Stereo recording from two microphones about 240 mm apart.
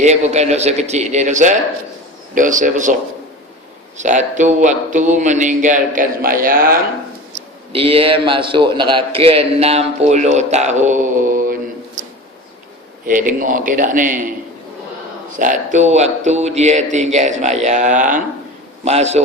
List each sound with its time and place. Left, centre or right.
0.0 s a man's voice: right
3.9 s speech: right
7.7 s a man's voice: right
13.1 s speech: right
15.4 s a man's voice: right